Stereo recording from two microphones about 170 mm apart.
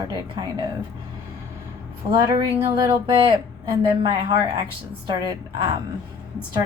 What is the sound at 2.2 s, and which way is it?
A woman's voice, 20° right (ahead or behind).